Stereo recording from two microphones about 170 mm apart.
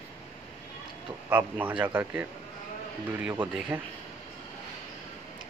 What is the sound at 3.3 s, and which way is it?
Speech, 10° right (ahead or behind).